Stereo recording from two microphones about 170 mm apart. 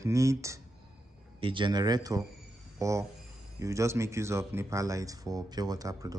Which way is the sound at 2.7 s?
20° right (ahead or behind).